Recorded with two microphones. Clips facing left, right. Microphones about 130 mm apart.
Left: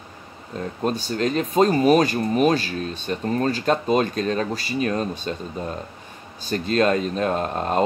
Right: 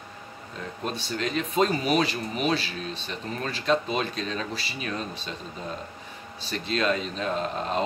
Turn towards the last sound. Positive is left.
turn(degrees=50)  # may be behind; listen again after turning